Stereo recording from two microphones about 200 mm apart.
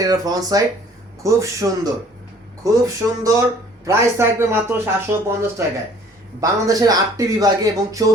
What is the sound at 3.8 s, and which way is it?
A man's voice, 15° right (ahead or behind).